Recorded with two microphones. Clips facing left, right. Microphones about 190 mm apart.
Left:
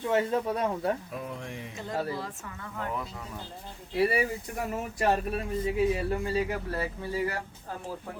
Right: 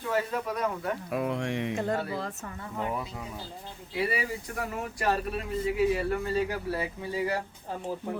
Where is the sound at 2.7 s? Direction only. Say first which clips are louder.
Right 2 dB; 15° right (ahead or behind).